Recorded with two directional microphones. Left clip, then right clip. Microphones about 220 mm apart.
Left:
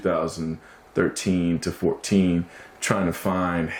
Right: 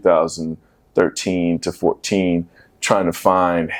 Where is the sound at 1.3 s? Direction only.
20° right (ahead or behind).